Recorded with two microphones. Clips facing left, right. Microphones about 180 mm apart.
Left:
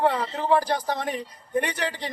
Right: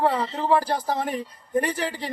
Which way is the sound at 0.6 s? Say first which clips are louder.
Right 1 dB; 35° right (ahead or behind).